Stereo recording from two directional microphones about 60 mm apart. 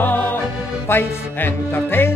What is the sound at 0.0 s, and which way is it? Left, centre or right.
Music, left.